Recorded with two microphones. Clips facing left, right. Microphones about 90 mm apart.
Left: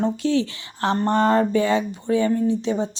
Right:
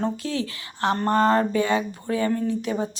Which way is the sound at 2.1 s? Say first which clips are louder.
Left 5 dB; 45° right (ahead or behind).